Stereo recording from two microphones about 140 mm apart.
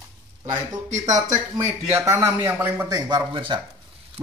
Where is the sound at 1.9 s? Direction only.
15° right (ahead or behind).